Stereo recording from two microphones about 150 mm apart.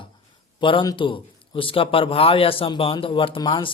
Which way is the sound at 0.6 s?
30° left (ahead or behind).